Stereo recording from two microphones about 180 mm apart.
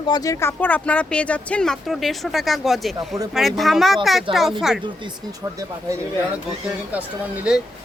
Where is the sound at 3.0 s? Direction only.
20° right (ahead or behind).